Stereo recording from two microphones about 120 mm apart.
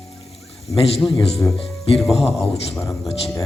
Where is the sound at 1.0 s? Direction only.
Centre (ahead or behind).